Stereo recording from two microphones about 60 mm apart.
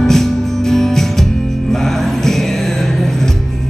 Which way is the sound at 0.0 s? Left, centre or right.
Centre.